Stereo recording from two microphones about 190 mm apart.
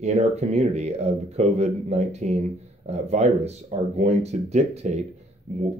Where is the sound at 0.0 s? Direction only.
35° right (ahead or behind).